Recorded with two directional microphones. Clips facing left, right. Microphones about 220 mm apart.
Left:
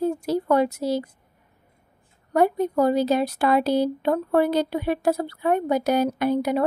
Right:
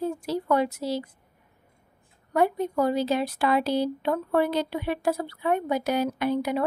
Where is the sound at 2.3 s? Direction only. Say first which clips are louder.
Left 4 dB; 40° left (ahead or behind).